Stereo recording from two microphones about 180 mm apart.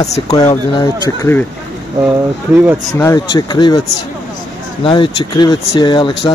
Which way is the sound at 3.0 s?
20° left (ahead or behind).